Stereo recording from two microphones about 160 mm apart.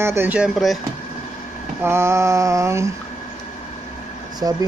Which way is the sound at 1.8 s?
15° right (ahead or behind).